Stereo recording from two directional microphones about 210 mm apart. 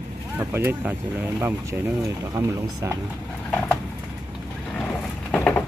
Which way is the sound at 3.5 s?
5° left (ahead or behind).